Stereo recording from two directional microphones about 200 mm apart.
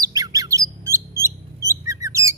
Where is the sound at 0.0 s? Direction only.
20° right (ahead or behind).